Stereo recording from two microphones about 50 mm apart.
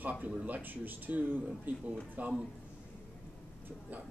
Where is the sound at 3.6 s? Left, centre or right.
Right.